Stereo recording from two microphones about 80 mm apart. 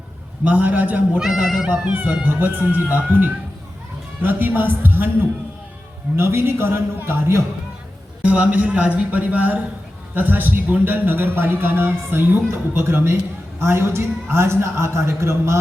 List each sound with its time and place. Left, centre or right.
0.4 s a man's voice: centre
1.2 s speech: centre
1.9 s a man's voice: right
6.1 s a man's voice: right
8.2 s a man's voice: centre; by 15.5 s right